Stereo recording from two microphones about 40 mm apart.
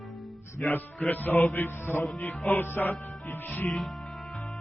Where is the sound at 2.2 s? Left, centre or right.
Left.